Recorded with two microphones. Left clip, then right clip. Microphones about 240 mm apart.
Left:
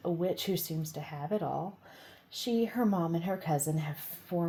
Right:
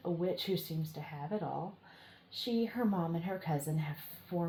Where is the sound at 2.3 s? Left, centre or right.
Left.